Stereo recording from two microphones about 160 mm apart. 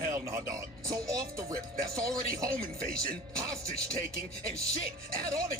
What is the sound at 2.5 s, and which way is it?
Speech, 70° right (ahead or behind).